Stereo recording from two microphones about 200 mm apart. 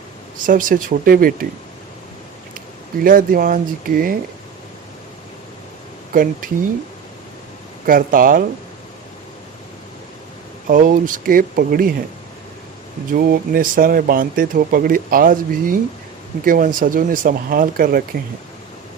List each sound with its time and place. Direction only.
0.4 s speech: 40° right (ahead or behind)
3.0 s speech: 45° right (ahead or behind)
6.4 s speech: 45° right (ahead or behind)
7.9 s speech: 45° right (ahead or behind)
10.7 s speech: 45° right (ahead or behind)
13.1 s speech: 50° right (ahead or behind)